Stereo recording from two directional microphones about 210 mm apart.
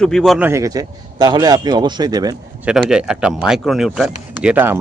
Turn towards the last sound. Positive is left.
turn(degrees=-10)  # may be behind; listen again after turning